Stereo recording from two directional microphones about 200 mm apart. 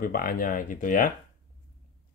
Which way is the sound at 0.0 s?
45° left (ahead or behind).